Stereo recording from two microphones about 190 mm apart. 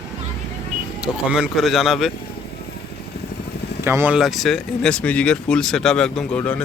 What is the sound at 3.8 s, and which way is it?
Speech, 10° right (ahead or behind).